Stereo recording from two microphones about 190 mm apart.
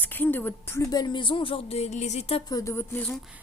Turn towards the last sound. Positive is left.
turn(degrees=10)  # may be behind; listen again after turning